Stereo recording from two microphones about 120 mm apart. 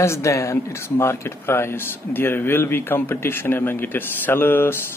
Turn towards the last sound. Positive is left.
turn(degrees=20)  # may be behind; listen again after turning